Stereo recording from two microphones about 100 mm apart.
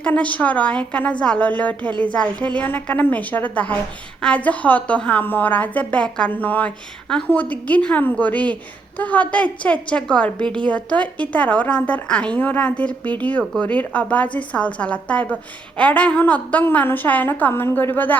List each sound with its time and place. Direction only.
0.0 s a woman's voice: 15° left (ahead or behind)